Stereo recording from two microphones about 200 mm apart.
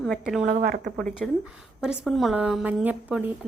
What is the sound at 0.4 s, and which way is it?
Speech, 50° right (ahead or behind).